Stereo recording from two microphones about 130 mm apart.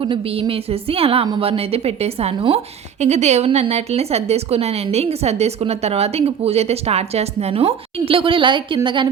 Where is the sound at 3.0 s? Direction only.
60° right (ahead or behind).